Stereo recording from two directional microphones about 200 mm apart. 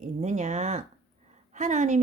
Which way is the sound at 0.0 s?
35° right (ahead or behind).